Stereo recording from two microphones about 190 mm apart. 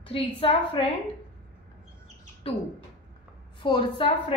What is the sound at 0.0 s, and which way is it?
Speech, 30° left (ahead or behind).